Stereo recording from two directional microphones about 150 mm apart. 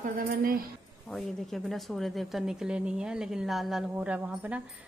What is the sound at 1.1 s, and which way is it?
Speech, centre (ahead or behind).